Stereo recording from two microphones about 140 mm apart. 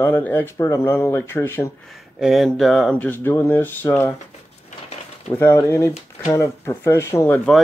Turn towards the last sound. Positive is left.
turn(degrees=20)  # may be behind; listen again after turning